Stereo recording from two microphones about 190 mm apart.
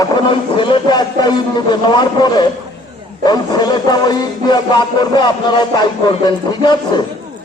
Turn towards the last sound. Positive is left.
turn(degrees=25)  # may be behind; listen again after turning